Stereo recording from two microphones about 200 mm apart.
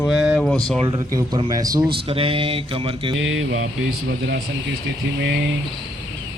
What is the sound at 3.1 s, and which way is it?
Speech, 70° right (ahead or behind).